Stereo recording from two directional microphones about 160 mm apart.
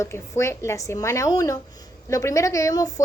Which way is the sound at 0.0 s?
15° left (ahead or behind).